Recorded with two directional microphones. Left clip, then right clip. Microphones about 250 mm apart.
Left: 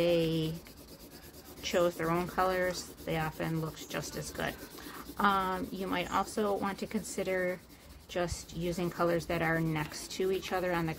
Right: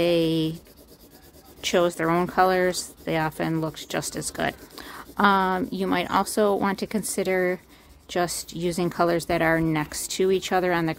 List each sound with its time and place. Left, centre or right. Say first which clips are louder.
0.0 s writing: right 7 dB; right
1.6 s speech: right 8 dB; right